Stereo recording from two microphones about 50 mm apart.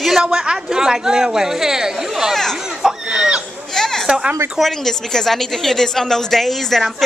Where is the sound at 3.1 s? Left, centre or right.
Centre.